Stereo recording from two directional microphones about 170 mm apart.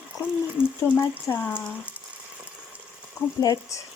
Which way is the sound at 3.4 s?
20° left (ahead or behind).